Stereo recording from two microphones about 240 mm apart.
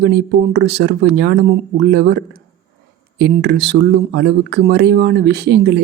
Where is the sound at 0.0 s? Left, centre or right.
Right.